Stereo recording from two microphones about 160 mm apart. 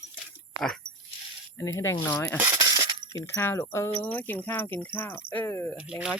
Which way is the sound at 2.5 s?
25° right (ahead or behind).